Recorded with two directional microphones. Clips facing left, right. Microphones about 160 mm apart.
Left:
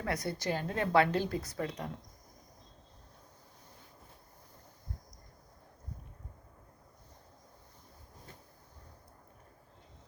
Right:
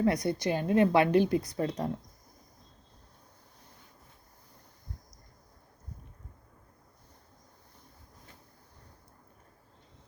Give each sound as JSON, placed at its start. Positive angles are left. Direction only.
{"t": 0.0, "sound": "a woman's voice", "side_deg": -20}
{"t": 1.5, "sound": "speech", "side_deg": -30}